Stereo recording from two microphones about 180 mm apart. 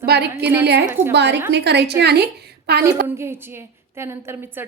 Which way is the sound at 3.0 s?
15° right (ahead or behind).